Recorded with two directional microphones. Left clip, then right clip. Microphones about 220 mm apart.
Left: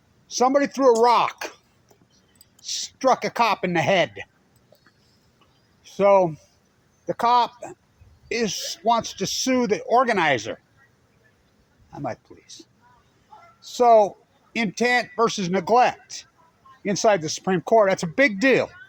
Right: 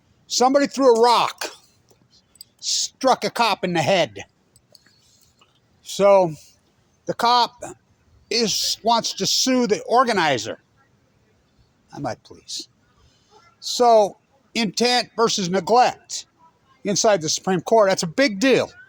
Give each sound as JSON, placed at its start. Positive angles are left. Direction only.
{"t": 0.3, "sound": "speech", "side_deg": -30}
{"t": 3.0, "sound": "speech", "side_deg": -30}
{"t": 6.0, "sound": "speech", "side_deg": -30}
{"t": 11.9, "sound": "speech", "side_deg": -30}
{"t": 13.7, "sound": "speech", "side_deg": -30}